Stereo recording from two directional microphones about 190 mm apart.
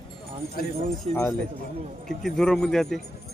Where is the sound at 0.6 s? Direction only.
50° left (ahead or behind).